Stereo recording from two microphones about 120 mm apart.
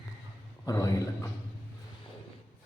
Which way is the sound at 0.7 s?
30° left (ahead or behind).